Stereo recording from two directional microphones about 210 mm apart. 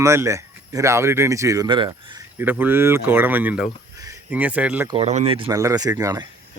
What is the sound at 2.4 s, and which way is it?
Speech, 10° right (ahead or behind).